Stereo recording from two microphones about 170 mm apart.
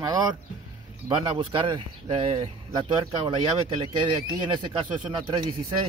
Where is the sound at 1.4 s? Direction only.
30° right (ahead or behind).